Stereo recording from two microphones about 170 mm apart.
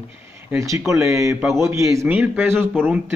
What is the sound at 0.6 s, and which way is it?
A man's voice, 15° right (ahead or behind).